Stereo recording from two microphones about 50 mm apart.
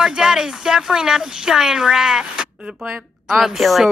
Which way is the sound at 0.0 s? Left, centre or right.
Centre.